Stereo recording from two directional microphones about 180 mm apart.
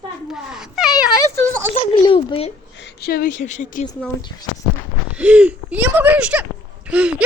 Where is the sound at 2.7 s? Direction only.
65° left (ahead or behind); by 3.9 s 45° left (ahead or behind).